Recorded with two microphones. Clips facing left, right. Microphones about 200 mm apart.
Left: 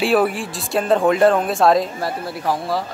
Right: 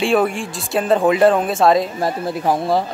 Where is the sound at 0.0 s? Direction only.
5° left (ahead or behind).